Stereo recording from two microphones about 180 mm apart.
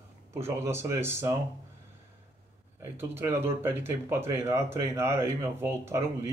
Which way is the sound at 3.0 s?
10° right (ahead or behind).